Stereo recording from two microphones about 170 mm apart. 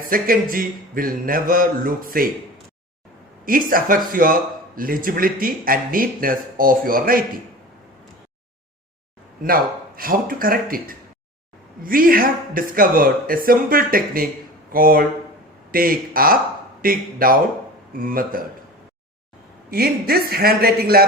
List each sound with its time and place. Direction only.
0.0 s speech: 55° right (ahead or behind)
3.4 s speech: 55° right (ahead or behind)
9.4 s speech: 60° right (ahead or behind)
19.7 s speech: 60° right (ahead or behind)